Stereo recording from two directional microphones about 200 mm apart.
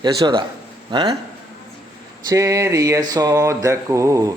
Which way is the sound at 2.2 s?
15° right (ahead or behind).